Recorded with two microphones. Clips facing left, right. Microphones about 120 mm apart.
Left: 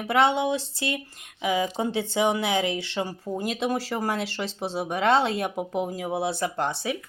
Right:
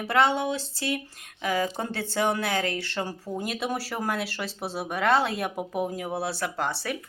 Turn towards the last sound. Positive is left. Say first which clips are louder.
# left 2 dB
turn(degrees=20)  # may be behind; listen again after turning